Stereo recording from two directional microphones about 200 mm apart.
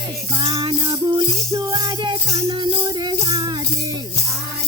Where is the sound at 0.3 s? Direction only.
25° right (ahead or behind).